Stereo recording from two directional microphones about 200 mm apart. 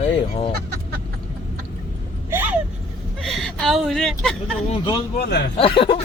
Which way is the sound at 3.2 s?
Centre (ahead or behind).